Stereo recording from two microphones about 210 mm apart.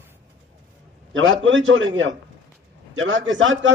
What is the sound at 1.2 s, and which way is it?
Speech, 65° right (ahead or behind).